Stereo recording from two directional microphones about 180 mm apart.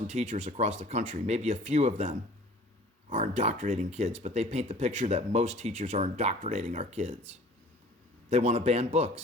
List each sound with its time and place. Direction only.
0.1 s speech: 40° right (ahead or behind)